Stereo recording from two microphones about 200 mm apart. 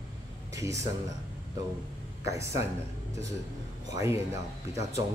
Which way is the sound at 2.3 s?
15° right (ahead or behind).